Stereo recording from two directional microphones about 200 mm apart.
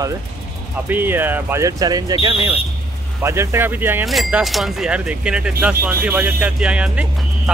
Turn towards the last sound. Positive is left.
turn(degrees=-5)  # may be behind; listen again after turning